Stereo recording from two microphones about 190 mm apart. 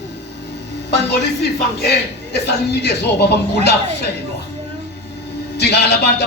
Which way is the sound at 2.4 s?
60° left (ahead or behind).